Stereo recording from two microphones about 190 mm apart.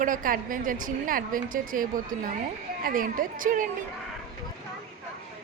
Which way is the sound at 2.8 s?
45° right (ahead or behind).